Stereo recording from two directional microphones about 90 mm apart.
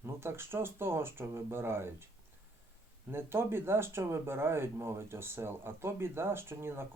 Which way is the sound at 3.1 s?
25° right (ahead or behind).